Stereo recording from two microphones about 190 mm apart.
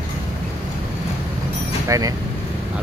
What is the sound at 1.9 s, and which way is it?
Speech, 20° right (ahead or behind).